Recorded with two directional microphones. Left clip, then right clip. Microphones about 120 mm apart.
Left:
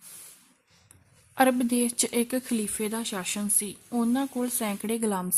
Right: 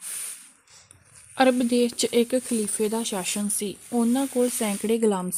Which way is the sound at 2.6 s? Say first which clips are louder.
Right 6 dB; 35° right (ahead or behind).